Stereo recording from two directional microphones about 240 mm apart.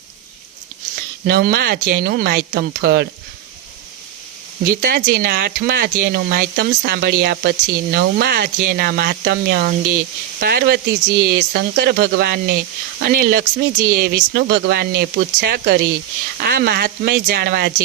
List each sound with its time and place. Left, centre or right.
0.9 s speech: right
4.6 s speech: right